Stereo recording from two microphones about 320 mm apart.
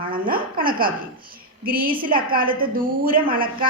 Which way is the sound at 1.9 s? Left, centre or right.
Centre.